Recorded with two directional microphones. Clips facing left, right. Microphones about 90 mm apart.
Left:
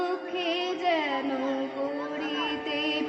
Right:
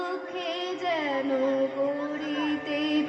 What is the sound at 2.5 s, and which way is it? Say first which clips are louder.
Music: right 4 dB; 35° right (ahead or behind).